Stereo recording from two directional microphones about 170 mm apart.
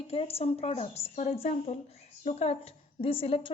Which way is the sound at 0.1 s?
35° left (ahead or behind).